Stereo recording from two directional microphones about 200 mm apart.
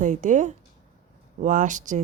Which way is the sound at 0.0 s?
40° right (ahead or behind).